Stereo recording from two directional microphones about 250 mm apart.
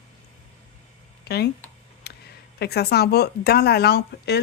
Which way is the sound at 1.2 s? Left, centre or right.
Left.